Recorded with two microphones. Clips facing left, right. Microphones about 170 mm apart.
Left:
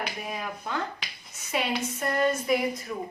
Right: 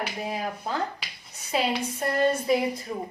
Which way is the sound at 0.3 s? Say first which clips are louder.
Right 3 dB; 35° right (ahead or behind).